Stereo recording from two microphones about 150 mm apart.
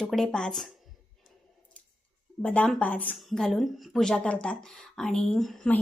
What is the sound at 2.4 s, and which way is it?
Speech, 10° left (ahead or behind).